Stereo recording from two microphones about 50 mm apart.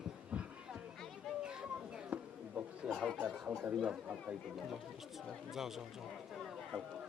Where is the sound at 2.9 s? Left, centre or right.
Centre.